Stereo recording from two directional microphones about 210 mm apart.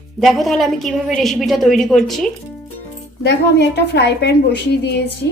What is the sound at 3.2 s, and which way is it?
A woman's voice, 55° left (ahead or behind).